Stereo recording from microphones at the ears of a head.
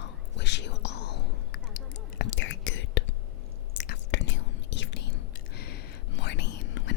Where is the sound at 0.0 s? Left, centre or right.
Left.